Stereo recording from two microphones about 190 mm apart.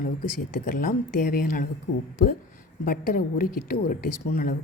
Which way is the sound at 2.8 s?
50° left (ahead or behind).